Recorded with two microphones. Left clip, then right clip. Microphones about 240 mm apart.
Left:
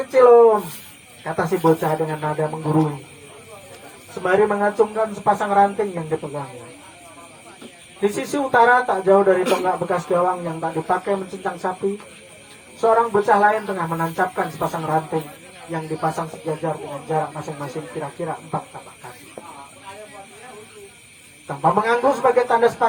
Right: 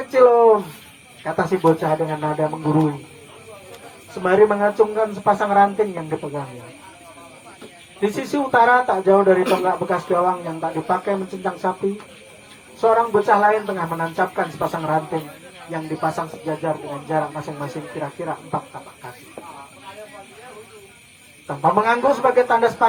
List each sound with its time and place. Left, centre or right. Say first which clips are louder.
0.1 s a man's voice: left 1 dB; right
4.1 s a man's voice: right 2 dB; right
8.0 s a man's voice: even; right
12.8 s a man's voice: even; right
16.0 s a man's voice: right 1 dB; right
21.4 s a man's voice: right 1 dB; right